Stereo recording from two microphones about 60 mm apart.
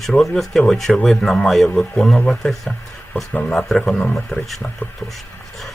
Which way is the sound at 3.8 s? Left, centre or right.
Centre.